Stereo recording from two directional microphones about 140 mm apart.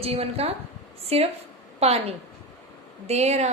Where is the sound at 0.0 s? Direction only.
45° right (ahead or behind).